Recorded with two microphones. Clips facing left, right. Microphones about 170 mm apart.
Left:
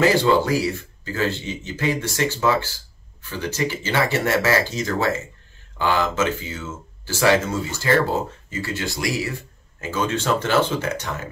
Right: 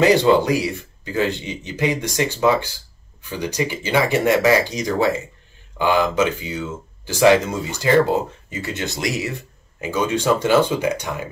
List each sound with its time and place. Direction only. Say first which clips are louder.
0.0 s speech: right 3 dB; 20° right (ahead or behind)